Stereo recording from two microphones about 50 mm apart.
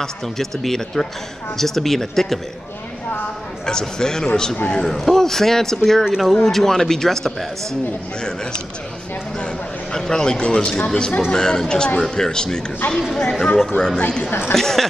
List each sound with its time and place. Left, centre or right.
0.0 s a man's voice: centre
3.6 s a man's voice: centre
6.3 s a man's voice: centre
9.9 s a man's voice: centre
14.5 s a man's voice: centre